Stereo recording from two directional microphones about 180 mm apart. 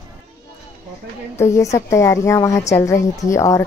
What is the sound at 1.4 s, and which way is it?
A woman's voice, 15° left (ahead or behind).